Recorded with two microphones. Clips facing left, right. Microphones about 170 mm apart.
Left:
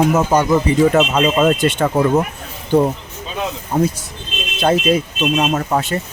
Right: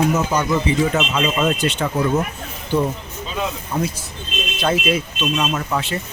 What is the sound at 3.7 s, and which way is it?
Speech, 45° left (ahead or behind).